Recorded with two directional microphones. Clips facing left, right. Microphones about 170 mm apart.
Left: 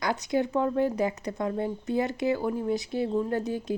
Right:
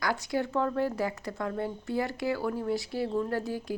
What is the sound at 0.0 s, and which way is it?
Speech, 20° left (ahead or behind).